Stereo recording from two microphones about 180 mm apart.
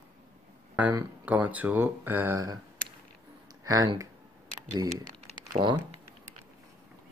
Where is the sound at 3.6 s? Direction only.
20° right (ahead or behind).